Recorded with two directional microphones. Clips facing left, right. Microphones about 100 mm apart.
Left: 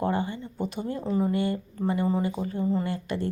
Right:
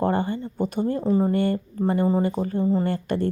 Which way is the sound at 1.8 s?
40° right (ahead or behind).